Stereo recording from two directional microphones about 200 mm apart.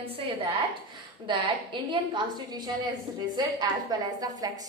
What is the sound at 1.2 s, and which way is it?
A woman's voice, 25° right (ahead or behind).